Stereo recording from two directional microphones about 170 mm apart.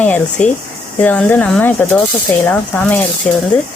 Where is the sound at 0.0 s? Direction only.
10° left (ahead or behind).